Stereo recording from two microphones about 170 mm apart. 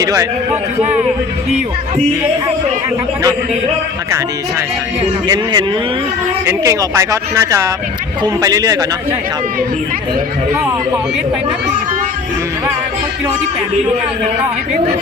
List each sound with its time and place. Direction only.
0.0 s a man's voice: 20° right (ahead or behind)
5.3 s a man's voice: 25° right (ahead or behind)
6.4 s a man's voice: 15° right (ahead or behind)
10.5 s speech: 15° right (ahead or behind)